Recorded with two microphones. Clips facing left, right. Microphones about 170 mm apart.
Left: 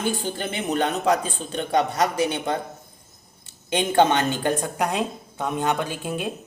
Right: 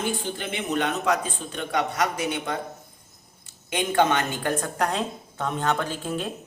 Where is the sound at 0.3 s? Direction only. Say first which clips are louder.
Left 3 dB; 35° left (ahead or behind).